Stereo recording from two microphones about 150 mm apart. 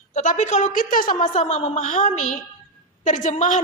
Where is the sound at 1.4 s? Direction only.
45° left (ahead or behind).